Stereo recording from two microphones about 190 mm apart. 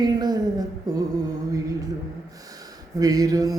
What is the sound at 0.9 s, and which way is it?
Mantra, 20° right (ahead or behind).